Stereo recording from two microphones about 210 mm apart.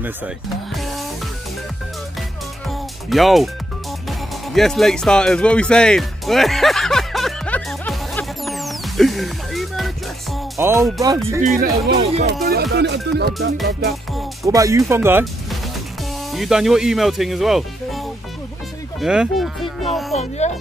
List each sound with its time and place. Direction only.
3.1 s speech: centre (ahead or behind)
4.5 s music: centre (ahead or behind)
10.6 s speech: 15° right (ahead or behind)
11.4 s speech: 30° right (ahead or behind)
12.7 s music: 55° right (ahead or behind)
14.4 s speech: 15° right (ahead or behind)
16.3 s speech: centre (ahead or behind)
18.9 s music: centre (ahead or behind)
20.2 s speech: 30° left (ahead or behind)